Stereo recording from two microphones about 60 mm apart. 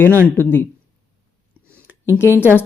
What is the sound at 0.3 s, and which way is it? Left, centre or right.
Speech, left.